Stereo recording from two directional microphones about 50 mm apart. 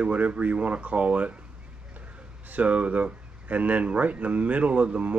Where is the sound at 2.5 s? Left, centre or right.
Right.